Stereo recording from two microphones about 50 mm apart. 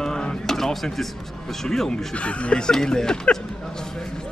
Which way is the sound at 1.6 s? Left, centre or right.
Centre.